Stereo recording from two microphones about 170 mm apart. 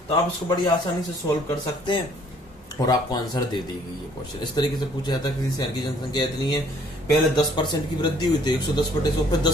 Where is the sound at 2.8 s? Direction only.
20° left (ahead or behind).